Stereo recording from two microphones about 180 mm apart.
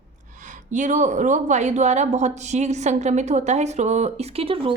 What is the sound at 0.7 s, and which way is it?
A woman's voice, 45° right (ahead or behind).